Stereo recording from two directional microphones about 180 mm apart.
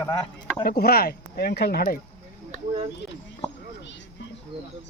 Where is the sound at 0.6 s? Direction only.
60° left (ahead or behind).